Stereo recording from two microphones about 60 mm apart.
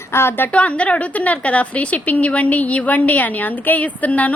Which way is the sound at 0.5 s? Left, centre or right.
Left.